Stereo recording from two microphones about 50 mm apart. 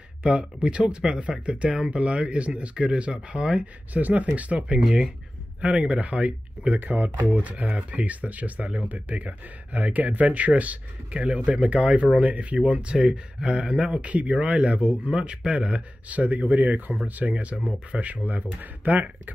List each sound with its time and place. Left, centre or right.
0.2 s speech: centre
3.9 s speech: right
16.1 s speech: right